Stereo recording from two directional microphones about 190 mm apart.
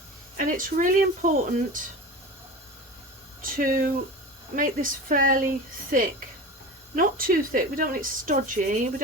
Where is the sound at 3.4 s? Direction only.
45° right (ahead or behind).